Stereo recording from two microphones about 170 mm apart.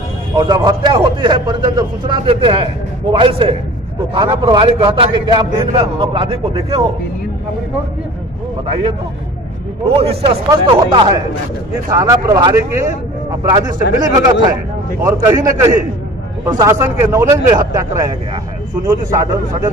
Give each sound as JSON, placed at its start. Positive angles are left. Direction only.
{"t": 0.4, "sound": "a man's voice", "side_deg": -25}
{"t": 9.8, "sound": "a man's voice", "side_deg": -35}